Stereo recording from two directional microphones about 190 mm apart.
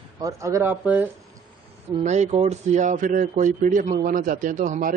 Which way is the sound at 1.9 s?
35° right (ahead or behind).